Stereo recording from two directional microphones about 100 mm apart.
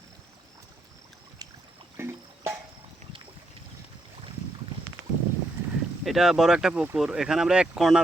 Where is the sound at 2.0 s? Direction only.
25° right (ahead or behind).